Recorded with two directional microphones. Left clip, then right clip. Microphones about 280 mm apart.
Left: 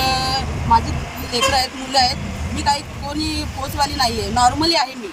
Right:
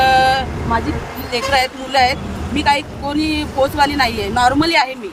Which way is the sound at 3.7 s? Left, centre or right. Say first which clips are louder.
Right 1 dB; centre.